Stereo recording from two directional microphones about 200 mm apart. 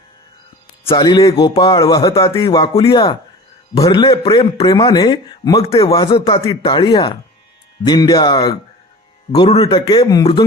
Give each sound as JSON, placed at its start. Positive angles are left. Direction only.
{"t": 0.9, "sound": "speech", "side_deg": 20}